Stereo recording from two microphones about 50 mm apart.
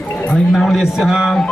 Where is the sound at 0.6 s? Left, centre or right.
Centre.